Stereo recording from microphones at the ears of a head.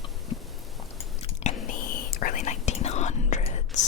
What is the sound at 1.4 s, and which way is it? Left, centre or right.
Whispering, left.